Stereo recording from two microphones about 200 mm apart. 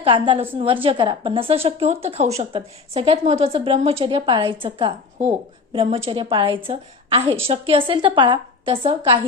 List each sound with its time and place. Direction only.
0.0 s a woman's voice: 25° right (ahead or behind)